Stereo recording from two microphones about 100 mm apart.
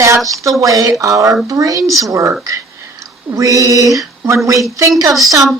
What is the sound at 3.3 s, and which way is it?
Speech, 35° right (ahead or behind).